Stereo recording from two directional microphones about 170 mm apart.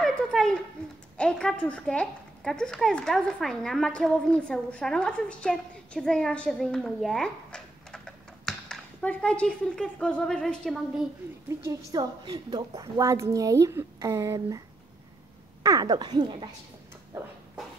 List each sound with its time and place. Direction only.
0.0 s speech: centre (ahead or behind)
11.4 s a woman's voice: 15° right (ahead or behind)
15.6 s a woman's voice: 20° right (ahead or behind)